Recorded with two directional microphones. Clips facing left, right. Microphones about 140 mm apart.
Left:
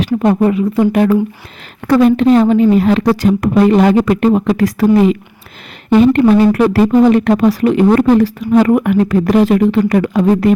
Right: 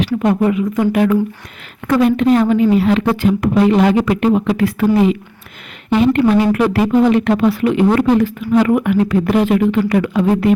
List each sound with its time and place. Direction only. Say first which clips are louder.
0.0 s speech: left 3 dB; 40° left (ahead or behind)
5.9 s speech: left 4 dB; 40° left (ahead or behind)